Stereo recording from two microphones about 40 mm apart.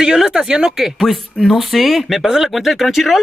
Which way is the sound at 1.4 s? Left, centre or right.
Centre.